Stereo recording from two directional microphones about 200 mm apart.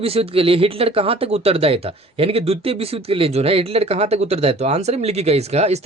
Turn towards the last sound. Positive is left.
turn(degrees=-30)  # may be behind; listen again after turning